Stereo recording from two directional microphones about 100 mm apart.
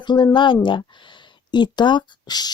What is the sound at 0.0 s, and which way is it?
A woman's voice, 50° left (ahead or behind).